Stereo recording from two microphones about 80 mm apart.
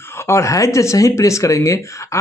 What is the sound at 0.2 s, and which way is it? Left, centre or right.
Speech, left.